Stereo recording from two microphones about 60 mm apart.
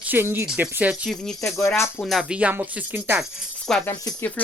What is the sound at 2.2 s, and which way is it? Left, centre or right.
Speech, centre.